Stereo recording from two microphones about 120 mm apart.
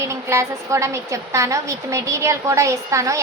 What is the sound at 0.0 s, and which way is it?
A woman's voice, 25° right (ahead or behind).